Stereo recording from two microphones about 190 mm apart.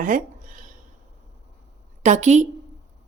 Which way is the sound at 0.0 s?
45° right (ahead or behind).